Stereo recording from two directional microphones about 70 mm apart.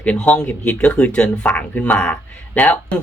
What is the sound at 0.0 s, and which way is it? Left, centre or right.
Speech, centre.